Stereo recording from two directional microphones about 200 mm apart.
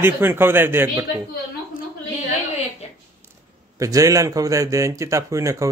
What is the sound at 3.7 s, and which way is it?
Speech, 15° right (ahead or behind).